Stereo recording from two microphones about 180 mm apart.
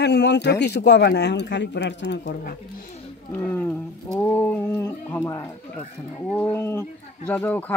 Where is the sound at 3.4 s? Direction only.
10° left (ahead or behind).